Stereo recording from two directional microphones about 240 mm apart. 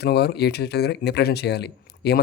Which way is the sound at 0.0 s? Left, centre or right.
Left.